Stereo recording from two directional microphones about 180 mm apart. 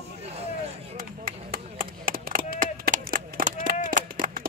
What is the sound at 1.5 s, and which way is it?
Chop, 50° right (ahead or behind).